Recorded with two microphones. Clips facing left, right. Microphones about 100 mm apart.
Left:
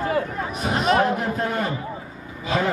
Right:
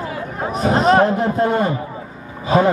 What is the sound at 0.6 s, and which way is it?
A man's voice, 35° right (ahead or behind).